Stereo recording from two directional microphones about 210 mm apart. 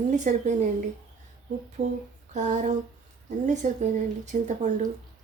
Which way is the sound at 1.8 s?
35° right (ahead or behind).